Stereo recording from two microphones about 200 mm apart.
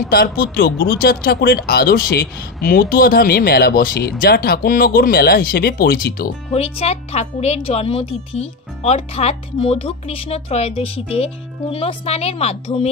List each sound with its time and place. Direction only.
0.1 s speech: 50° left (ahead or behind)
6.5 s speech: 30° left (ahead or behind)